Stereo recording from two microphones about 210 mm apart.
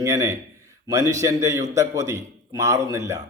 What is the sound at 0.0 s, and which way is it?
Speech, 15° right (ahead or behind).